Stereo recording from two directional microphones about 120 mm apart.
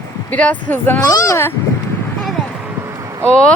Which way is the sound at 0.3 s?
15° left (ahead or behind).